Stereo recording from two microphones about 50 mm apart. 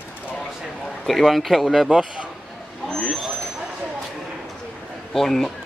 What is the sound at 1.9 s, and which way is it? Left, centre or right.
Speech, centre.